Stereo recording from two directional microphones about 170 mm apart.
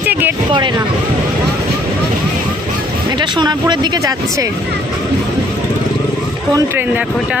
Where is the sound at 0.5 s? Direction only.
25° right (ahead or behind).